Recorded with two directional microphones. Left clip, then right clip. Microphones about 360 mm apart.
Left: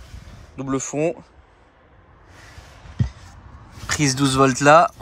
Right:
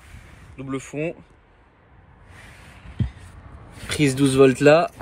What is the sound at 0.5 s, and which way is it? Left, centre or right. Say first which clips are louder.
Speech: left 5 dB; centre.